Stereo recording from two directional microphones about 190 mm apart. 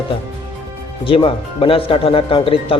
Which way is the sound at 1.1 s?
30° left (ahead or behind).